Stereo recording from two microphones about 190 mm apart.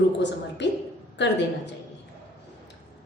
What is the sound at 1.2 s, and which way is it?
Speech, 70° left (ahead or behind).